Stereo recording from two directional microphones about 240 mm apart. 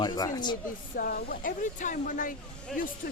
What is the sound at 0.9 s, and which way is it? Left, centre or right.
Speech, left.